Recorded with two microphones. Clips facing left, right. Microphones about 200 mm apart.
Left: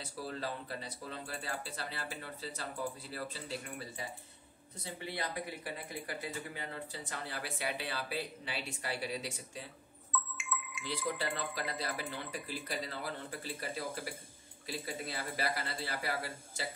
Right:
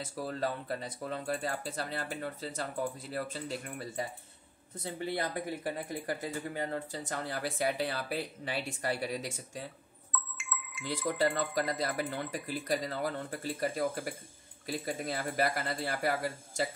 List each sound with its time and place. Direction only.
0.0 s speech: 50° right (ahead or behind)
5.0 s speech: 45° right (ahead or behind)
10.1 s music: centre (ahead or behind)
11.0 s speech: 45° right (ahead or behind)